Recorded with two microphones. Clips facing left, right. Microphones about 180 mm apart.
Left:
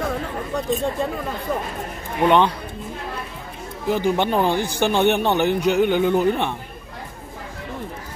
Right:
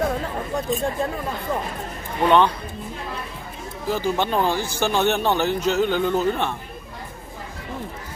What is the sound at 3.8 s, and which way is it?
Speech, 15° left (ahead or behind).